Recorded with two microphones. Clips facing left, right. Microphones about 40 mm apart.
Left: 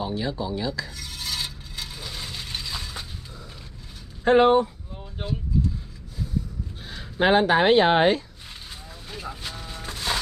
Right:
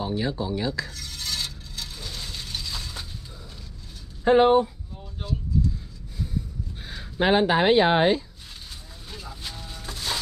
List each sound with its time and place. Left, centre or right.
0.2 s speech: centre
0.8 s a sound: centre
2.7 s mechanisms: centre
4.2 s speech: centre
5.2 s speech: left
7.0 s a sound: centre
7.4 s speech: left
9.4 s wood: centre